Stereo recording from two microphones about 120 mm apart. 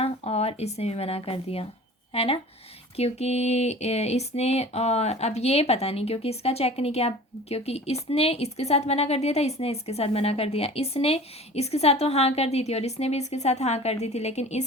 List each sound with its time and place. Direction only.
0.0 s speech: 55° left (ahead or behind)